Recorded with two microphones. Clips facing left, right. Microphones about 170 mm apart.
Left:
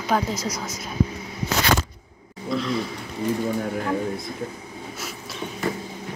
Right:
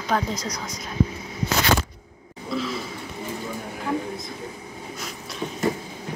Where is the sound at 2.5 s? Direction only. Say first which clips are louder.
Left 3 dB; centre (ahead or behind).